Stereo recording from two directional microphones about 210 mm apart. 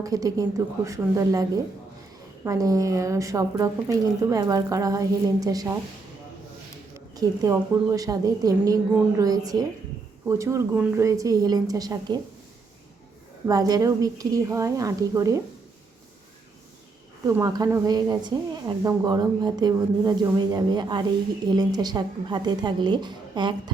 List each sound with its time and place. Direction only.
0.0 s a woman's voice: 15° right (ahead or behind)
6.9 s a woman's voice: 15° right (ahead or behind)
13.5 s a woman's voice: 15° right (ahead or behind)
17.2 s speech: 15° right (ahead or behind)